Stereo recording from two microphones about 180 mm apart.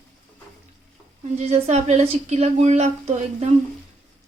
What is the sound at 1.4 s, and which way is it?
A woman's voice, 35° right (ahead or behind).